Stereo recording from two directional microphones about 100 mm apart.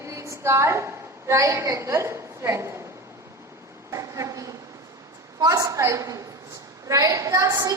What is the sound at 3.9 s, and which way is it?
A woman's voice, 30° right (ahead or behind).